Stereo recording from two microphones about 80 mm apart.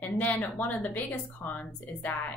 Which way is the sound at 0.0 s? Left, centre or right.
Left.